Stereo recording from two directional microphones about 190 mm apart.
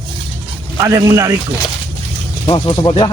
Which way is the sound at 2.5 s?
25° left (ahead or behind).